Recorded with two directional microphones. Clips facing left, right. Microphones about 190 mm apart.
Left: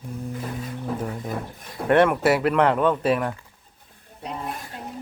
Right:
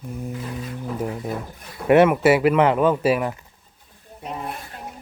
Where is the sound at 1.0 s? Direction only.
10° right (ahead or behind).